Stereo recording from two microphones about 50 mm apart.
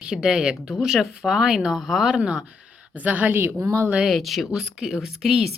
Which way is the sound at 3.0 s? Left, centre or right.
Right.